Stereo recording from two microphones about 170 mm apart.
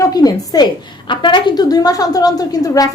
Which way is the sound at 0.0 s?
20° left (ahead or behind).